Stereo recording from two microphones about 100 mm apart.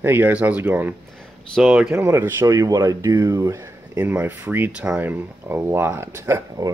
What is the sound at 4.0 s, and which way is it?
Speech, 20° right (ahead or behind).